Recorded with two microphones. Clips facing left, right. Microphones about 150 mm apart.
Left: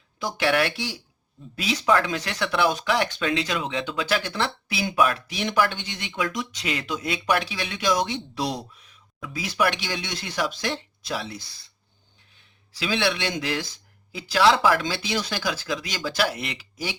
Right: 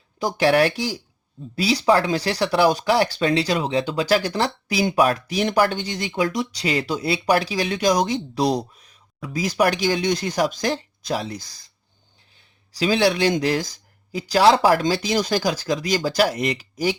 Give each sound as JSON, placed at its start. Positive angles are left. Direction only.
{"t": 0.2, "sound": "speech", "side_deg": -40}
{"t": 12.7, "sound": "speech", "side_deg": -40}